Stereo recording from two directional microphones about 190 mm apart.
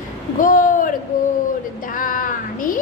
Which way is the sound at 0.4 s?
45° left (ahead or behind).